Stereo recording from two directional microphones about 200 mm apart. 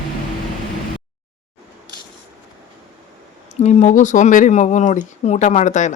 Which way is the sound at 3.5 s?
35° left (ahead or behind).